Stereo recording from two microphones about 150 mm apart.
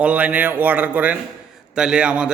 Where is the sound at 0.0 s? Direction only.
10° right (ahead or behind).